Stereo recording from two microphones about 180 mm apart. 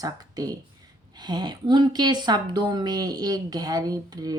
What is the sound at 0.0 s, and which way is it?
Speech, 20° right (ahead or behind).